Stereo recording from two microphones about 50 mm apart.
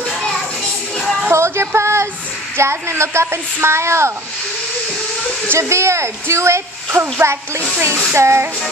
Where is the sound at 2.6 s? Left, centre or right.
Right.